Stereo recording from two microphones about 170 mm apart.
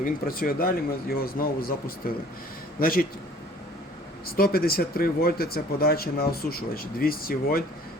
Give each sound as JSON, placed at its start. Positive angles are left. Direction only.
{"t": 0.0, "sound": "speech", "side_deg": 60}
{"t": 4.3, "sound": "speech", "side_deg": 60}